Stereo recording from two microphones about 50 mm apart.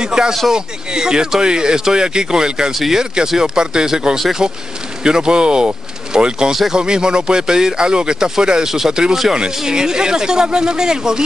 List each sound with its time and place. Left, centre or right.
0.0 s speech: centre
2.7 s speech: centre
6.5 s speech: centre
6.8 s speech: centre